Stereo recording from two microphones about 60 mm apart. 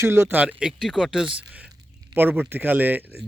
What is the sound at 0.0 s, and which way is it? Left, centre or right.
Speech, right.